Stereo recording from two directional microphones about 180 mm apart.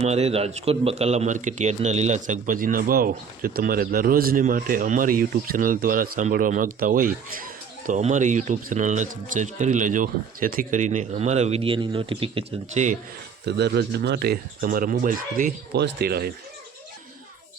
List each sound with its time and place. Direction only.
0.0 s speech: 35° right (ahead or behind)
13.4 s speech: 70° right (ahead or behind)